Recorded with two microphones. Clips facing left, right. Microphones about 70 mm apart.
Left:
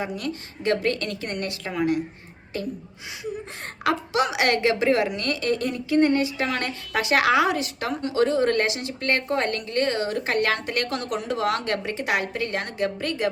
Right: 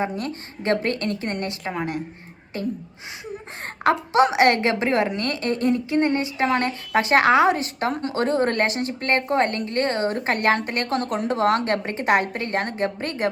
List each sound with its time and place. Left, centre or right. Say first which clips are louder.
0.0 s a woman's voice: right 3 dB; right
4.1 s a woman's voice: right 6 dB; right